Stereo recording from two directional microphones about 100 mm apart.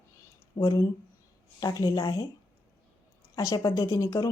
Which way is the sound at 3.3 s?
35° left (ahead or behind).